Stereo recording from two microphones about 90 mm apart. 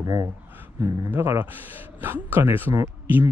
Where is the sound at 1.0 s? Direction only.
25° right (ahead or behind).